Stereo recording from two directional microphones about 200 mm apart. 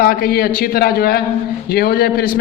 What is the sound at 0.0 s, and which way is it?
A man's voice, 50° left (ahead or behind).